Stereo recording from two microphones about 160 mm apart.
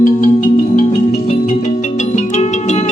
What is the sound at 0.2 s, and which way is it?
Music, 55° left (ahead or behind).